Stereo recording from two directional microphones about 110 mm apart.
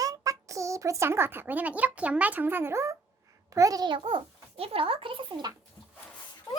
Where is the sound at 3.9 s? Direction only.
55° right (ahead or behind).